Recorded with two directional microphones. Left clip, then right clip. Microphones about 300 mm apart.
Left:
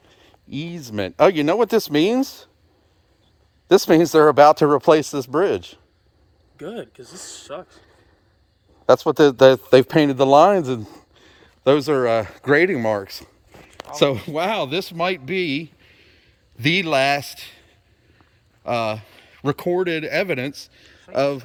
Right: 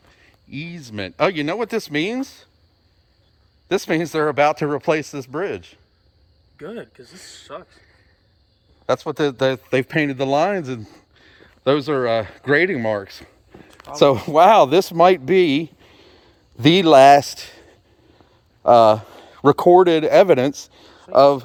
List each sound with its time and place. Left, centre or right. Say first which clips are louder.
0.1 s speech: left 2 dB; left
3.7 s speech: left 7 dB; left
4.8 s speech: left 5 dB; left
5.3 s speech: left 6 dB; left
8.9 s a man's voice: left 6 dB; left; by 13.3 s centre
14.0 s speech: right 7 dB; centre